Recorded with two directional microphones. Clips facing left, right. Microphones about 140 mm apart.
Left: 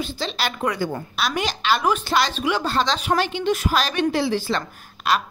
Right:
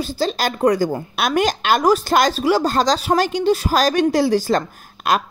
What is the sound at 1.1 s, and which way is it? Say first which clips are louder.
A woman's voice: right 6 dB; 50° right (ahead or behind).